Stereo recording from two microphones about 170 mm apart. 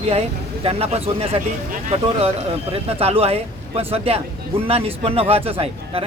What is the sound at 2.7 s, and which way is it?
A man's voice, 35° right (ahead or behind).